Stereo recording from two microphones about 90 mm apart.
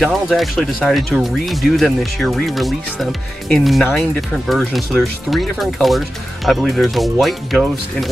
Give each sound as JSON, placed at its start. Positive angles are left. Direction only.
{"t": 0.0, "sound": "speech", "side_deg": 0}